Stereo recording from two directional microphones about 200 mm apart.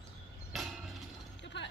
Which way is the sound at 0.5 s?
Centre (ahead or behind).